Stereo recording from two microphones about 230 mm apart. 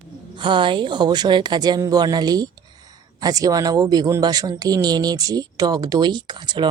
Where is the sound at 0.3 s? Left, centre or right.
Right.